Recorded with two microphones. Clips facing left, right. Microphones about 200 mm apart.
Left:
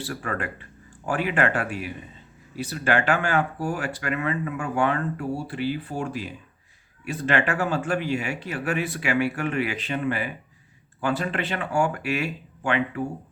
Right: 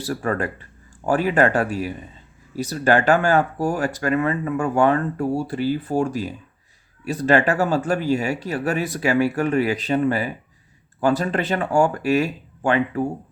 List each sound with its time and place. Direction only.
0.0 s speech: 40° right (ahead or behind)